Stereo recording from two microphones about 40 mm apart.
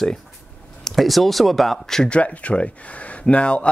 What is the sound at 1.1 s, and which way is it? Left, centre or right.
Speech, centre.